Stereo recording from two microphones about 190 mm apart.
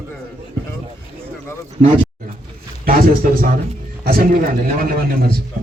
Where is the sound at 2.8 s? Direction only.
50° right (ahead or behind).